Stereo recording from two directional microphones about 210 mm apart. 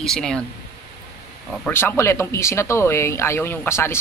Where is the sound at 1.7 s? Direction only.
10° left (ahead or behind).